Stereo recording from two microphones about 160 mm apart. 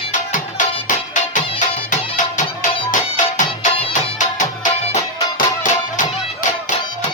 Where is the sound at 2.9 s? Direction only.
55° left (ahead or behind).